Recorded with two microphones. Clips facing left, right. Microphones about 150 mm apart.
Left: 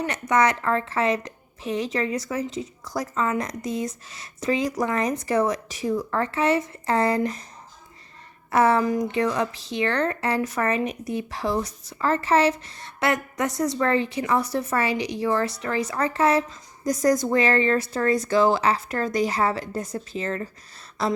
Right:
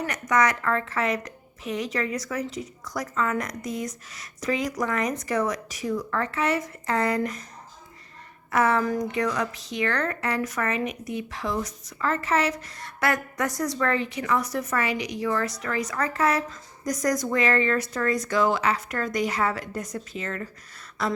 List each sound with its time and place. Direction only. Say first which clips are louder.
0.0 s speech: left 2 dB; 25° left (ahead or behind)
8.4 s speech: left 3 dB; 30° left (ahead or behind)
21.0 s a sound: left 3 dB; 30° left (ahead or behind)